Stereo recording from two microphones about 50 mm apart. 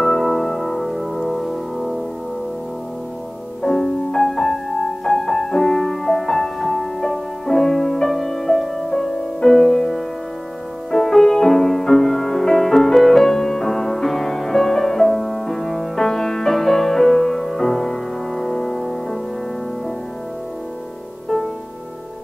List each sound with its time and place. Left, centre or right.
0.0 s music: centre
3.6 s music: centre